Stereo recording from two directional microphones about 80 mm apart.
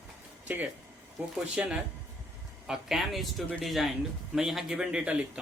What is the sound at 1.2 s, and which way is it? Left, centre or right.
A man's voice, centre.